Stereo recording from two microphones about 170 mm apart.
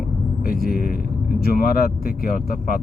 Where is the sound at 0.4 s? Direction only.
60° left (ahead or behind).